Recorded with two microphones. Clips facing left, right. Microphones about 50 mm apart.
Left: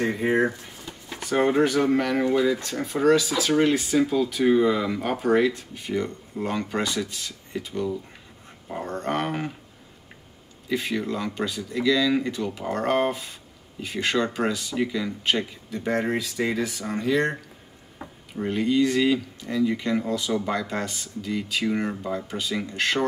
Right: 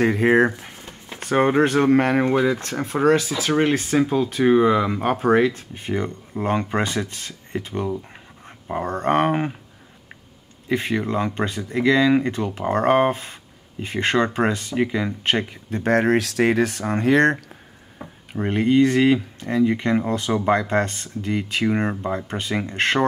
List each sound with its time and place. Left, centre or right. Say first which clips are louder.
0.0 s speech: right 6 dB; right
0.6 s a sound: right 1 dB; right
1.2 s speech: right 3 dB; right
1.7 s speech: right 5 dB; right
10.7 s speech: right 4 dB; right
18.3 s speech: right 5 dB; right